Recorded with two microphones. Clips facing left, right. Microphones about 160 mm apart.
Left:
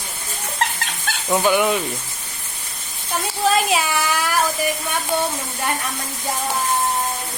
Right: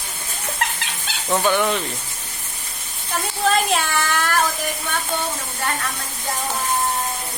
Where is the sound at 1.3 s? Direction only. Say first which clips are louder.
Left 2 dB; 10° left (ahead or behind).